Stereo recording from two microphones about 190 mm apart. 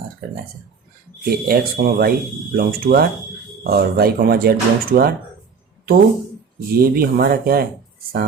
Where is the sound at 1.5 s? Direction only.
50° right (ahead or behind).